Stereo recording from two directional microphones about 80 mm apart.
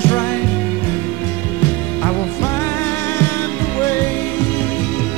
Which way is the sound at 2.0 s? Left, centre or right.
Left.